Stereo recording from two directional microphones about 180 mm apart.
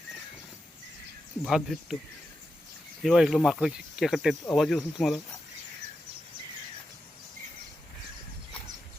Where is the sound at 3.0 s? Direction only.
Centre (ahead or behind).